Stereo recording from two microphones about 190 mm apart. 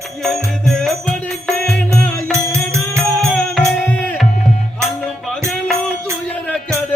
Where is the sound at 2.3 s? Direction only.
15° right (ahead or behind).